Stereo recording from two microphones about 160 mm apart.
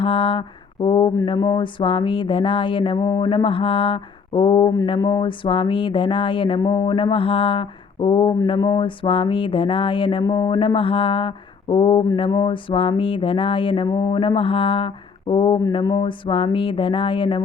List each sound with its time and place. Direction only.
0.0 s mantra: 30° left (ahead or behind)